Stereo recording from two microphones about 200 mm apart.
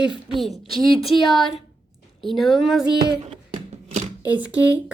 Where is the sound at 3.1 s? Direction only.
25° right (ahead or behind).